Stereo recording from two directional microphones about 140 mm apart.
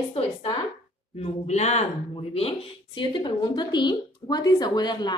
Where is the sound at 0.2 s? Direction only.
45° left (ahead or behind).